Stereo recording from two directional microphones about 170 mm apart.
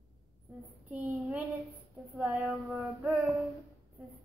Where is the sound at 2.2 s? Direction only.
10° right (ahead or behind).